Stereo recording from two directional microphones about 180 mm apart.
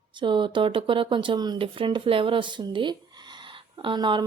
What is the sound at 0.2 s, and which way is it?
Speech, 25° right (ahead or behind).